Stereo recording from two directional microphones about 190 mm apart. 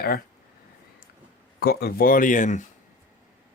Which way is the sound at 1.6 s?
55° left (ahead or behind).